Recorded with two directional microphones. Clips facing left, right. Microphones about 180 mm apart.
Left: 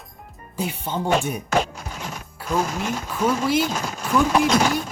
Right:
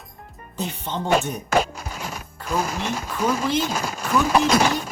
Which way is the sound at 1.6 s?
5° right (ahead or behind).